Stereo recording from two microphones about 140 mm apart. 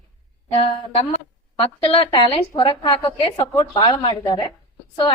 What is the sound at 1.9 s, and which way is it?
A woman's voice, 40° left (ahead or behind).